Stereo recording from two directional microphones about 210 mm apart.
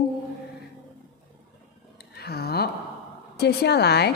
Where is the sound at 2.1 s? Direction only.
50° left (ahead or behind).